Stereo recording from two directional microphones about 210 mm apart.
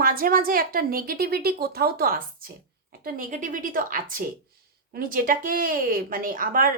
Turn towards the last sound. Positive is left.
turn(degrees=-40)  # may be behind; listen again after turning